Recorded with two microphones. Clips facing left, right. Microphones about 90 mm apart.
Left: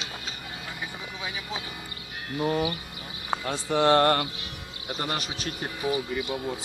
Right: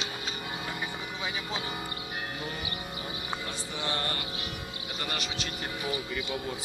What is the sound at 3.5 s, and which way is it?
Mantra, 70° left (ahead or behind).